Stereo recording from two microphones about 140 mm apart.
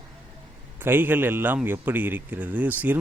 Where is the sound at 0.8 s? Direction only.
15° right (ahead or behind).